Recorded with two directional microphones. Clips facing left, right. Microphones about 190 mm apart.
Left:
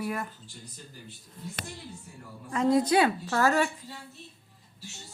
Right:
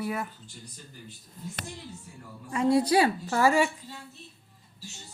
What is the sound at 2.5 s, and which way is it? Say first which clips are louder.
A woman's voice: even; 10° right (ahead or behind).